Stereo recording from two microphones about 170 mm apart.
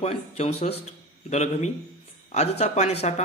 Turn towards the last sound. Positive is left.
turn(degrees=40)  # may be behind; listen again after turning